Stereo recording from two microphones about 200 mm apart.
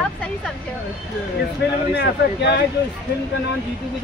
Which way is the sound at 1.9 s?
55° left (ahead or behind).